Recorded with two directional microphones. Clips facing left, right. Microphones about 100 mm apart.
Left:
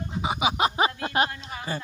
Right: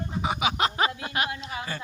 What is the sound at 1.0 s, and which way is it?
Speech, 30° left (ahead or behind).